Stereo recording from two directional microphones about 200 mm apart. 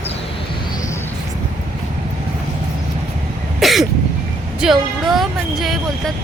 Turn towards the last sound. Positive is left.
turn(degrees=0)  # may be behind; listen again after turning